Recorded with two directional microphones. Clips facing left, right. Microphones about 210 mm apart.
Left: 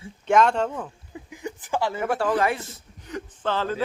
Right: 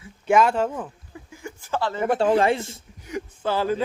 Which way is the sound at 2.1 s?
25° right (ahead or behind).